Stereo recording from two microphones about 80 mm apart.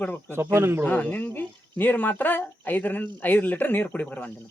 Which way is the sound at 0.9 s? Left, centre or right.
Centre.